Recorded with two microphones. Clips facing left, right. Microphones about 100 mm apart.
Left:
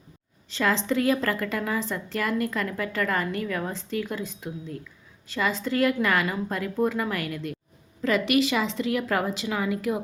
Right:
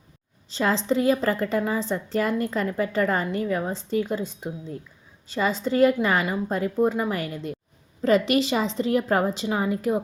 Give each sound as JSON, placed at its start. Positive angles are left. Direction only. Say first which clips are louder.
{"t": 0.5, "sound": "a woman's voice", "louder": "right 2 dB", "side_deg": -25}